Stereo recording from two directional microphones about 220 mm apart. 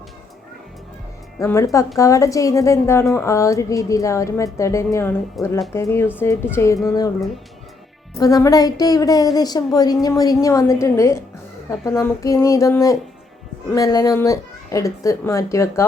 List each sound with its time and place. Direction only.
1.4 s a woman's voice: 15° left (ahead or behind)
8.2 s a woman's voice: 15° left (ahead or behind)